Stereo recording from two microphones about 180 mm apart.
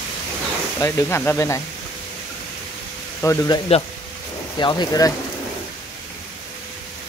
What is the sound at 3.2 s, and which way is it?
Speech, 15° left (ahead or behind).